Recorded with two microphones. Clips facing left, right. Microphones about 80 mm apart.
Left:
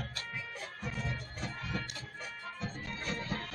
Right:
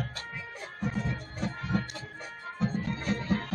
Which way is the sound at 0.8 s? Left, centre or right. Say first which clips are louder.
Right 8 dB; right.